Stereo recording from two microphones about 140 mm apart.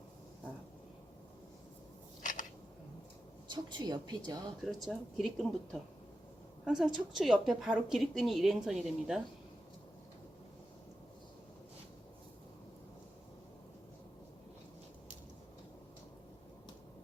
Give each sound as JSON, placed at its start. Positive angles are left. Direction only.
{"t": 2.2, "sound": "a sound", "side_deg": 70}
{"t": 3.5, "sound": "a woman's voice", "side_deg": -30}
{"t": 4.6, "sound": "a woman's voice", "side_deg": 0}